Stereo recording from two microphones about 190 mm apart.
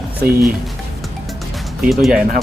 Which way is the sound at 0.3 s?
50° right (ahead or behind).